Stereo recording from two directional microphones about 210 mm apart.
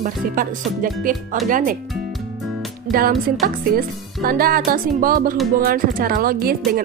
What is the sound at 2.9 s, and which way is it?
A woman's voice, 45° right (ahead or behind).